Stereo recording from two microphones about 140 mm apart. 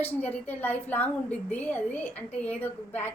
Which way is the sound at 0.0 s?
10° left (ahead or behind).